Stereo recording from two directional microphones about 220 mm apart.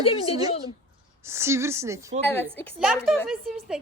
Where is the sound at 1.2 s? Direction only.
10° right (ahead or behind).